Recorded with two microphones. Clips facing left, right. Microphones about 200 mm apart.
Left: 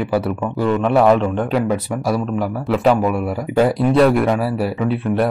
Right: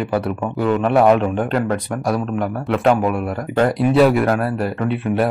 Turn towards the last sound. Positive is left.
turn(degrees=0)  # may be behind; listen again after turning